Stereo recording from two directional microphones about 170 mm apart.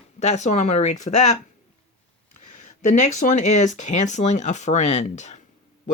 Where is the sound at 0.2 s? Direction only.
40° left (ahead or behind).